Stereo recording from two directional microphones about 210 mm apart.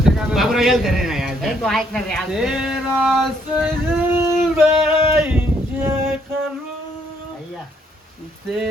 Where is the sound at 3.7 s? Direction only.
10° right (ahead or behind).